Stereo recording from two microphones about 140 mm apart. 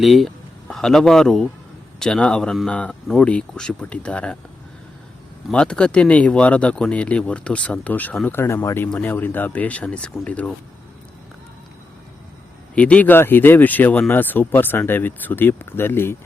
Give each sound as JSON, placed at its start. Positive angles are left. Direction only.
{"t": 0.0, "sound": "speech", "side_deg": 0}
{"t": 5.5, "sound": "speech", "side_deg": 5}
{"t": 12.7, "sound": "speech", "side_deg": 10}